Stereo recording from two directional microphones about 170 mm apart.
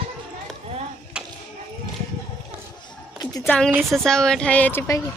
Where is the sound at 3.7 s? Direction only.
10° right (ahead or behind).